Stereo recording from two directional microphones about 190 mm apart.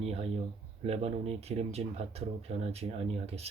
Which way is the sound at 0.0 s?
35° right (ahead or behind).